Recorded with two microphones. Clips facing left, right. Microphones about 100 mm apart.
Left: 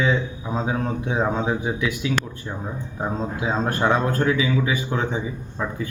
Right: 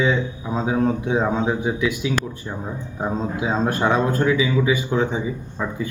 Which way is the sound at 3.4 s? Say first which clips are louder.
Right 1 dB; 15° right (ahead or behind).